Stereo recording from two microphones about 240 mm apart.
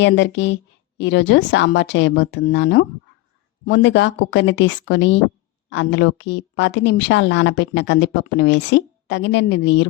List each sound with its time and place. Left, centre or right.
0.0 s a woman's voice: left